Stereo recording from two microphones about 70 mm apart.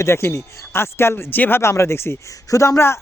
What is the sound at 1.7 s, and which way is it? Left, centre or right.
Speech, left.